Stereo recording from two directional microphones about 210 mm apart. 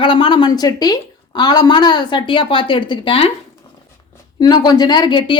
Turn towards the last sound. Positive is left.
turn(degrees=20)  # may be behind; listen again after turning